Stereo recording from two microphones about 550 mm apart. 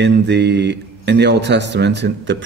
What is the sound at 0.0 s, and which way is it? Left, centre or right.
Speech, centre.